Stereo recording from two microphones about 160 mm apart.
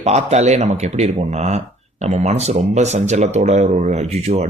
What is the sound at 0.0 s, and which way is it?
Speech, 45° right (ahead or behind).